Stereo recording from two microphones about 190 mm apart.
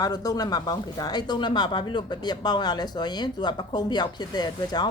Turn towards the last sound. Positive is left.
turn(degrees=20)  # may be behind; listen again after turning